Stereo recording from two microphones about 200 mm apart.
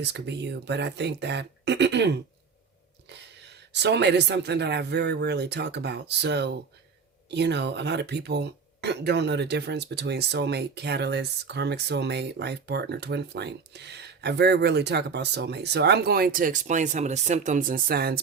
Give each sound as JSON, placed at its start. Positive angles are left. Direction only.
{"t": 0.0, "sound": "speech", "side_deg": -60}